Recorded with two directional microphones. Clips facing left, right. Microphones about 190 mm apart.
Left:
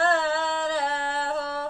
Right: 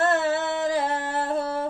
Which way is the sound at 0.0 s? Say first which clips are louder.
Right 1 dB; 20° right (ahead or behind).